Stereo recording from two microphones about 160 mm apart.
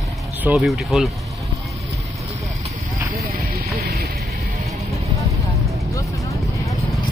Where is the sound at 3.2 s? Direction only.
80° right.